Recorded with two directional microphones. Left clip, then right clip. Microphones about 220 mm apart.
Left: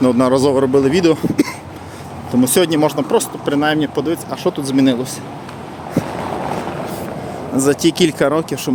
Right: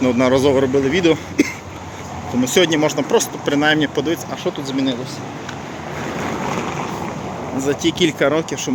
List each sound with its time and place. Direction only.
0.0 s a man's voice: 20° left (ahead or behind)
4.4 s speech: 35° left (ahead or behind)
7.6 s a man's voice: 35° left (ahead or behind)